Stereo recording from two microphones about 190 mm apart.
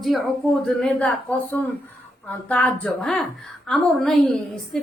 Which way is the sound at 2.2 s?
5° left (ahead or behind).